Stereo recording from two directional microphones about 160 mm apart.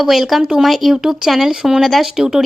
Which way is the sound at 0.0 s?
Centre (ahead or behind).